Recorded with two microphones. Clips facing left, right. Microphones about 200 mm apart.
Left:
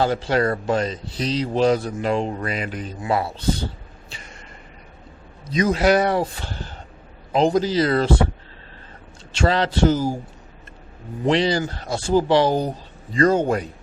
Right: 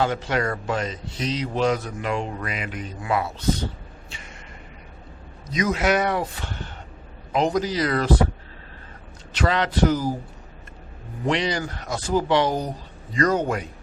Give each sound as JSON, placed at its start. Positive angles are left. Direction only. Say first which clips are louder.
{"t": 0.0, "sound": "speech", "louder": "left 4 dB", "side_deg": 35}
{"t": 4.1, "sound": "a sound", "louder": "left 3 dB", "side_deg": 35}
{"t": 5.5, "sound": "speech", "louder": "left 4 dB", "side_deg": 30}
{"t": 9.3, "sound": "speech", "louder": "left 3 dB", "side_deg": 30}
{"t": 11.3, "sound": "speech", "louder": "left 5 dB", "side_deg": 30}